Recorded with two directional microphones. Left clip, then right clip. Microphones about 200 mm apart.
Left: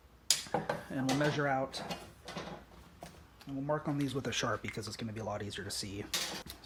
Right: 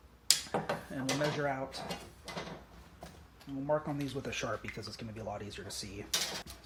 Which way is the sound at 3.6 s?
45° left (ahead or behind).